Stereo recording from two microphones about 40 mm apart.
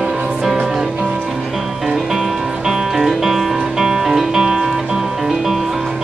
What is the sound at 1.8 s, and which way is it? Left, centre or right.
Music, centre.